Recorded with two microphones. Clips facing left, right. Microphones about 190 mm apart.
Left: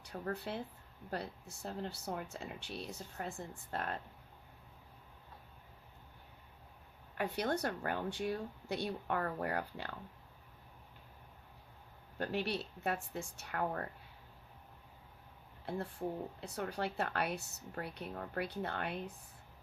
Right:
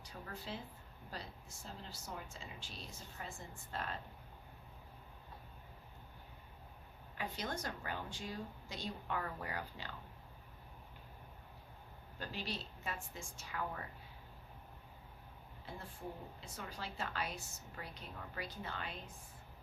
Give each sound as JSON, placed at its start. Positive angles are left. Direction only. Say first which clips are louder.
{"t": 0.0, "sound": "speech", "louder": "left 8 dB", "side_deg": 60}
{"t": 7.2, "sound": "speech", "louder": "left 7 dB", "side_deg": 60}
{"t": 12.1, "sound": "speech", "louder": "left 8 dB", "side_deg": 60}
{"t": 15.7, "sound": "speech", "louder": "left 9 dB", "side_deg": 60}